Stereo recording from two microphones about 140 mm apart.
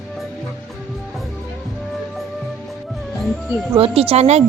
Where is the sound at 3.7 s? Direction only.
40° right (ahead or behind).